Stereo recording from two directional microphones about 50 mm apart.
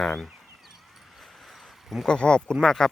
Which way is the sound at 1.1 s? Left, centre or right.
Centre.